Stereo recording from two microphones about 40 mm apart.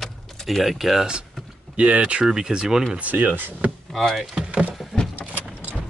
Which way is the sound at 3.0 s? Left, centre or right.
Right.